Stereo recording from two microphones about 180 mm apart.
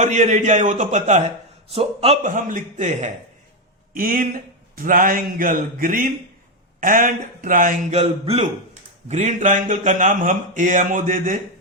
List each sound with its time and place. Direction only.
0.0 s a man's voice: 40° right (ahead or behind)
3.9 s speech: 50° right (ahead or behind)